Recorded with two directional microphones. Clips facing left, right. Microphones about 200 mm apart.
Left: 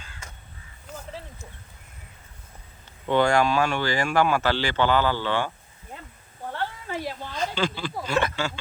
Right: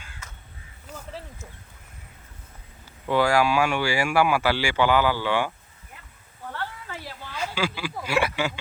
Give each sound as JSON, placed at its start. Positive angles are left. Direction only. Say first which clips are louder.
{"t": 3.1, "sound": "speech", "louder": "even", "side_deg": -5}
{"t": 6.5, "sound": "a sound", "louder": "left 4 dB", "side_deg": 20}
{"t": 7.3, "sound": "speech", "louder": "even", "side_deg": -10}